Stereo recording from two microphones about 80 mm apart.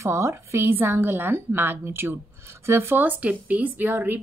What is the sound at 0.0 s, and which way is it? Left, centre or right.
A woman's voice, right.